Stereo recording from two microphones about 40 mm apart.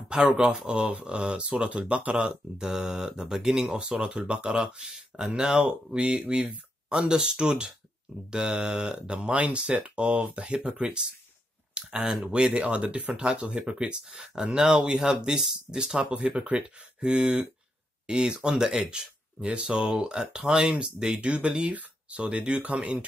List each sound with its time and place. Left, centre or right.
1.0 s speech: right
11.7 s speech: right
16.0 s speech: right